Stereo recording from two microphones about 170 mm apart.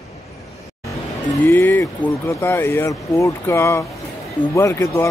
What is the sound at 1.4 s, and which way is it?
Speech, 15° left (ahead or behind).